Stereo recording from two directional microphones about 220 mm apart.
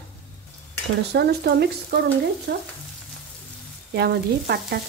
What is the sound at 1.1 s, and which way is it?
A woman's voice, 50° right (ahead or behind).